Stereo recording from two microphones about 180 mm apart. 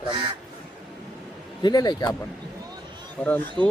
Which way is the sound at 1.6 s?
20° left (ahead or behind).